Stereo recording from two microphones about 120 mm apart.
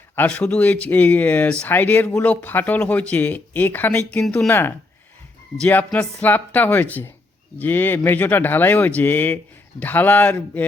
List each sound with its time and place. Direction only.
0.2 s speech: 10° left (ahead or behind)
4.4 s speech: 15° left (ahead or behind)